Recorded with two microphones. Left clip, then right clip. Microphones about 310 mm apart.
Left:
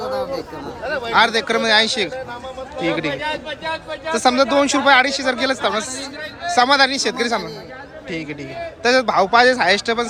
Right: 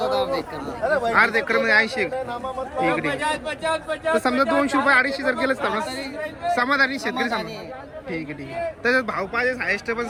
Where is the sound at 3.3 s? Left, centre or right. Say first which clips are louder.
Even; right.